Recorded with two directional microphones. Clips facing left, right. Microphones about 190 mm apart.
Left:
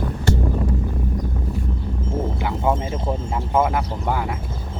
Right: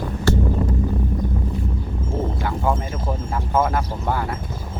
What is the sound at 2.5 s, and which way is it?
Music, 20° left (ahead or behind).